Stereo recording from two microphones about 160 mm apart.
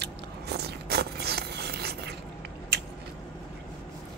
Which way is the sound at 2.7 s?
90° right.